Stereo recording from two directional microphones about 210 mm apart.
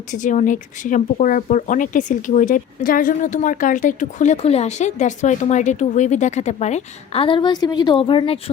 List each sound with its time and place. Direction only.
0.1 s speech: 35° left (ahead or behind)